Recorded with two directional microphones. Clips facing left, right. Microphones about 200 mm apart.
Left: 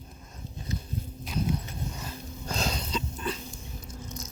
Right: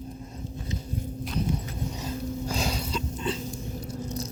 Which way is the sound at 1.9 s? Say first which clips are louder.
Right 9 dB; 15° right (ahead or behind).